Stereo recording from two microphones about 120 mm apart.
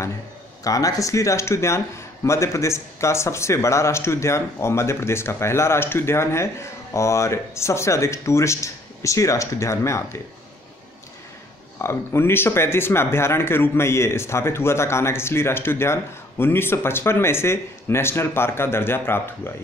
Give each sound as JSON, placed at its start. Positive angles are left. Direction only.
{"t": 0.7, "sound": "speech", "side_deg": 30}
{"t": 11.8, "sound": "speech", "side_deg": 20}